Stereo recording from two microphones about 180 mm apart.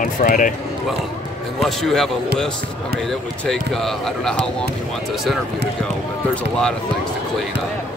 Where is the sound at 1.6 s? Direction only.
Centre (ahead or behind).